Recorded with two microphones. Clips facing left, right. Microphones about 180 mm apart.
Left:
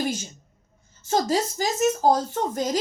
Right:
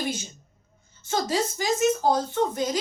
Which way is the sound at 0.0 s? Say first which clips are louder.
Left 3 dB; 45° left (ahead or behind).